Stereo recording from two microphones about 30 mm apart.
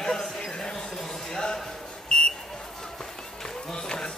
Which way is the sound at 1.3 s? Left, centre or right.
Left.